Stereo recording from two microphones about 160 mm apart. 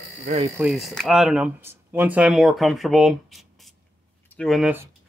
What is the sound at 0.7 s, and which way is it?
Speech, centre (ahead or behind).